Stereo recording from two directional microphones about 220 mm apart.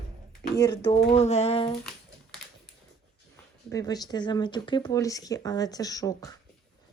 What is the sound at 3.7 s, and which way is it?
Speech, 15° left (ahead or behind).